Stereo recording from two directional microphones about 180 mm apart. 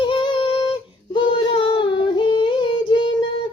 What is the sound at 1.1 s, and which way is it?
Female singing, 25° left (ahead or behind).